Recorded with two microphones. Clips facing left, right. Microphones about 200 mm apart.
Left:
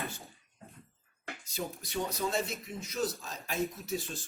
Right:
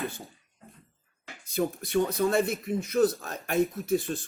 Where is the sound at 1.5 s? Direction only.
55° right (ahead or behind).